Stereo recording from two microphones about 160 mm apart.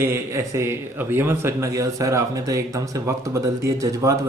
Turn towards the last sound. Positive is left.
turn(degrees=-20)  # may be behind; listen again after turning